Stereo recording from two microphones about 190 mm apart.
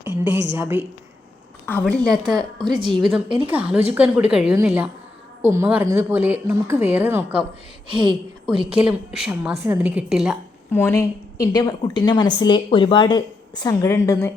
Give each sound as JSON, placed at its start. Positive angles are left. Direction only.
{"t": 0.1, "sound": "a woman's voice", "side_deg": -70}
{"t": 1.6, "sound": "a woman's voice", "side_deg": 5}
{"t": 2.4, "sound": "a woman's voice", "side_deg": -20}
{"t": 2.9, "sound": "a woman's voice", "side_deg": 0}
{"t": 7.9, "sound": "a woman's voice", "side_deg": -25}
{"t": 8.7, "sound": "a woman's voice", "side_deg": -5}
{"t": 10.7, "sound": "a woman's voice", "side_deg": 10}